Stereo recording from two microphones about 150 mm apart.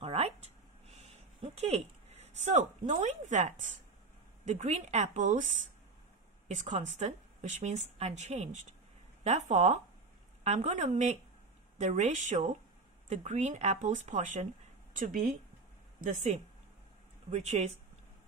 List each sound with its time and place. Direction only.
0.0 s a sound: 45° right (ahead or behind)
4.5 s a woman's voice: 50° right (ahead or behind)
6.5 s a woman's voice: 55° right (ahead or behind)
15.0 s speech: 65° right (ahead or behind)
17.3 s a woman's voice: 50° right (ahead or behind)